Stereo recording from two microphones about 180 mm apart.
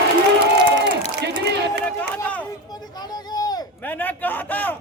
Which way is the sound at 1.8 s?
10° left (ahead or behind).